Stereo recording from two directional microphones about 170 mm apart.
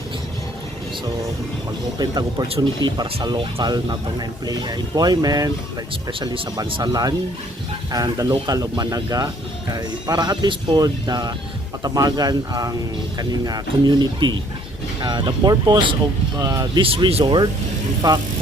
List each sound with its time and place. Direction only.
2.0 s speech: 25° right (ahead or behind)
16.8 s speech: 35° right (ahead or behind)